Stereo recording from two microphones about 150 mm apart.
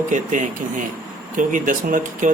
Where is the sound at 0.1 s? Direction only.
55° right (ahead or behind).